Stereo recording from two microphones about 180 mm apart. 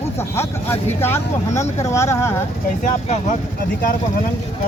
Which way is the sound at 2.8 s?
45° left (ahead or behind).